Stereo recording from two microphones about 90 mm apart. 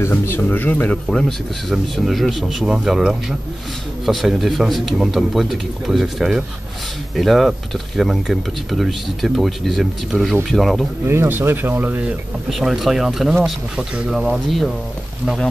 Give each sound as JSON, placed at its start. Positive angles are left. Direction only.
{"t": 0.0, "sound": "speech", "side_deg": 25}
{"t": 1.7, "sound": "a man's voice", "side_deg": 0}
{"t": 11.1, "sound": "speech", "side_deg": -25}
{"t": 12.4, "sound": "a man's voice", "side_deg": -5}